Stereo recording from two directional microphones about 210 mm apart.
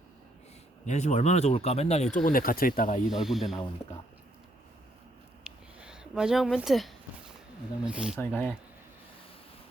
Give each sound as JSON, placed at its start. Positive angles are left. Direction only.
{"t": 0.9, "sound": "speech", "side_deg": 35}
{"t": 3.1, "sound": "speech", "side_deg": 0}
{"t": 5.4, "sound": "a sound", "side_deg": -5}
{"t": 7.9, "sound": "speech", "side_deg": -5}
{"t": 8.2, "sound": "speech", "side_deg": 5}